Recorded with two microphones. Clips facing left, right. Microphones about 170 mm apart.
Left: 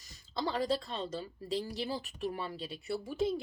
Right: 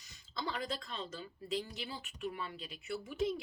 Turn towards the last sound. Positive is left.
turn(degrees=30)  # may be behind; listen again after turning